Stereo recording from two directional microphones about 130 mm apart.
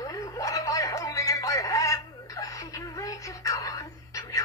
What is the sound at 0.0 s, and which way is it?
Music, 25° left (ahead or behind).